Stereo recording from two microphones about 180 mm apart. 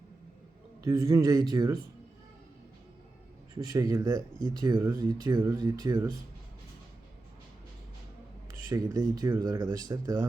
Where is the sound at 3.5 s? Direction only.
20° right (ahead or behind).